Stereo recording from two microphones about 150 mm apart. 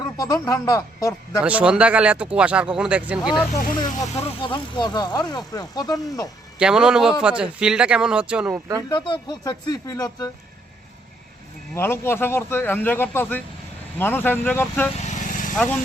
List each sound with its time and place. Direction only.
0.4 s speech: 25° left (ahead or behind)
1.5 s speech: 10° right (ahead or behind)
3.8 s speech: 30° left (ahead or behind)
6.6 s speech: 5° right (ahead or behind)
8.9 s speech: 30° left (ahead or behind)
11.7 s speech: 15° left (ahead or behind)
15.0 s vehicle: 60° left (ahead or behind)
15.5 s speech: 5° left (ahead or behind)